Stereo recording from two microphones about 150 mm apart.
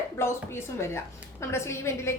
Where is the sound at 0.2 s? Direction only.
15° left (ahead or behind).